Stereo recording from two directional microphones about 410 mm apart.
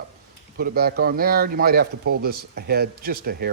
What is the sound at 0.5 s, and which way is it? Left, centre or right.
A man's voice, right.